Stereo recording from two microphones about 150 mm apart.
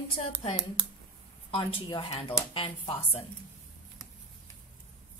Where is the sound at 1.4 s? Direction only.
35° left (ahead or behind).